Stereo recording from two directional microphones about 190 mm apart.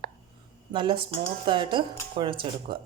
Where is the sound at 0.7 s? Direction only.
25° right (ahead or behind).